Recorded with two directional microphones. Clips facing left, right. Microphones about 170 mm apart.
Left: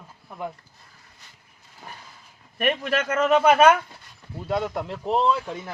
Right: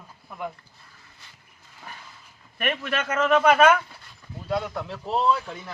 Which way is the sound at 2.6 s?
35° left (ahead or behind).